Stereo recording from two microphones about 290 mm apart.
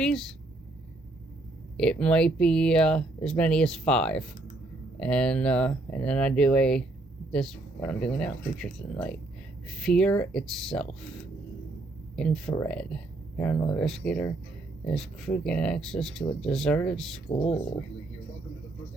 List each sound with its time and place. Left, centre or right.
0.0 s speech: centre
1.7 s speech: centre
12.1 s speech: centre
17.2 s speech: left